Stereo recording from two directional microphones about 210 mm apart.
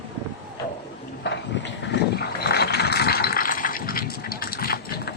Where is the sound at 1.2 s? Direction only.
55° left (ahead or behind).